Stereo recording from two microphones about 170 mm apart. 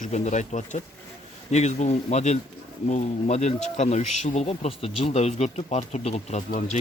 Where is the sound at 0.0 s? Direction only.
45° left (ahead or behind).